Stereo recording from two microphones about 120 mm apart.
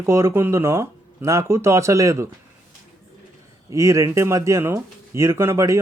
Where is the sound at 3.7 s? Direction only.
25° right (ahead or behind).